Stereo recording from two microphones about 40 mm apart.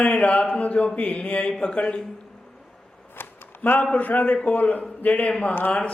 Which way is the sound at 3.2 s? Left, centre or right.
Left.